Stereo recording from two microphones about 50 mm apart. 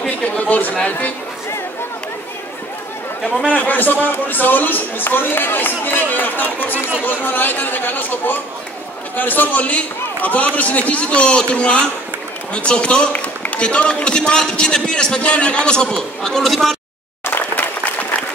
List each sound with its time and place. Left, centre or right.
0.1 s a man's voice: left
3.5 s a man's voice: left
13.1 s a sound: left
13.6 s a man's voice: left; by 16.7 s centre